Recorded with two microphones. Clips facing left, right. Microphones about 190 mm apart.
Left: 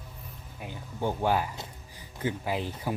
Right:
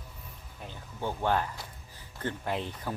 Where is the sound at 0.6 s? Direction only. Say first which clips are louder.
Left 4 dB; 10° left (ahead or behind).